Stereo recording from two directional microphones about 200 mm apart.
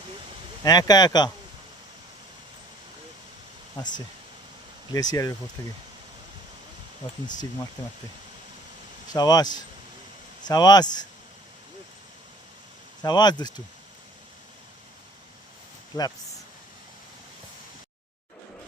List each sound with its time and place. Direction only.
0.6 s speech: 20° left (ahead or behind)
4.9 s speech: 20° left (ahead or behind)
9.1 s speech: 20° left (ahead or behind)
10.5 s speech: 20° left (ahead or behind)
13.0 s speech: 20° left (ahead or behind)
15.9 s speech: 20° left (ahead or behind)